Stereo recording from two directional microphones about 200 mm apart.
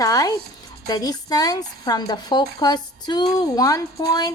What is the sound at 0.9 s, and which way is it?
A woman's voice, 20° left (ahead or behind).